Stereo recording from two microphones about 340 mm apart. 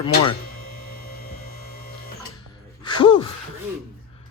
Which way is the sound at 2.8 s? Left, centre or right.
Centre.